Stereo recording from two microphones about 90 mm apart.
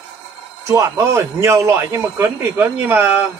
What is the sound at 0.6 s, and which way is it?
Speech, 35° right (ahead or behind).